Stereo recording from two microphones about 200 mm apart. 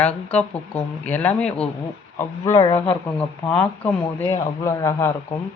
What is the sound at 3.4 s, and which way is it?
A man's voice, 5° left (ahead or behind).